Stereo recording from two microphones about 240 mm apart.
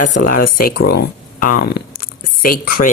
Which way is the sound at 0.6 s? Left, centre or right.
Left.